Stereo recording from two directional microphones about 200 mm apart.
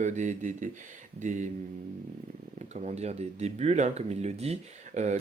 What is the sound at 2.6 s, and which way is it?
Speech, 35° right (ahead or behind).